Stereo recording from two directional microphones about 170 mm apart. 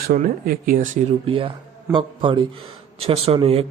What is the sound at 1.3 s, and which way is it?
A man's voice, 30° right (ahead or behind).